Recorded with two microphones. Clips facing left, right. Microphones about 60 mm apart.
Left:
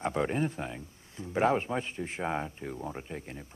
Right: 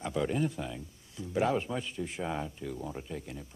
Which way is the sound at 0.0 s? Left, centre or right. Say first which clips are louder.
Left 1 dB; left.